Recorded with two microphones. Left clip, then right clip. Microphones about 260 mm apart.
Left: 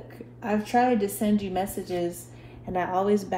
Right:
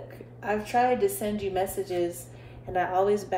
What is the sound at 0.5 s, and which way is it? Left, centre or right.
Speech, left.